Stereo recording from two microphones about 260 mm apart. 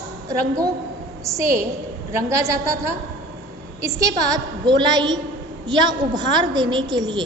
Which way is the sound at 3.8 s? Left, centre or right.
Centre.